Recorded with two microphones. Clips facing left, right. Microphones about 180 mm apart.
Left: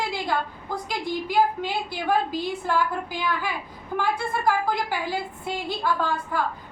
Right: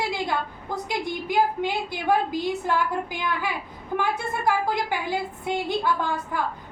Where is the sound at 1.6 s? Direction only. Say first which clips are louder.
Right 2 dB; 15° right (ahead or behind).